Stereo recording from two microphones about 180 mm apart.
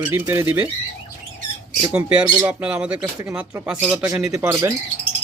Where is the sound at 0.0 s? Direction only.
10° right (ahead or behind).